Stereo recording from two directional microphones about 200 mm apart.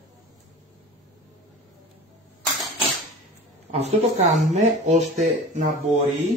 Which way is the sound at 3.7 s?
35° right (ahead or behind).